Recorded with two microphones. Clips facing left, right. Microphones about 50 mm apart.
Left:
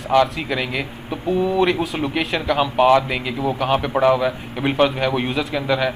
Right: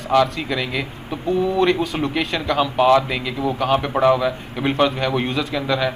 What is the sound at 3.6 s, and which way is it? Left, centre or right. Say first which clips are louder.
A man's voice: even; centre.